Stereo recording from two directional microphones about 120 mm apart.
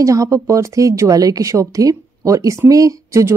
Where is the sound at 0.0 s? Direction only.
25° right (ahead or behind).